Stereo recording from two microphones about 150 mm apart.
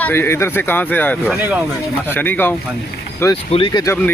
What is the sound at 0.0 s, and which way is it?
Speech, 15° left (ahead or behind).